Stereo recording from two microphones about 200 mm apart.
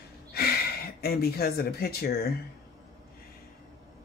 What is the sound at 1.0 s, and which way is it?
Speech, 50° left (ahead or behind).